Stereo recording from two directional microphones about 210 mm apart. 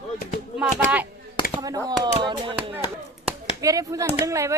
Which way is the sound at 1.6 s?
15° right (ahead or behind).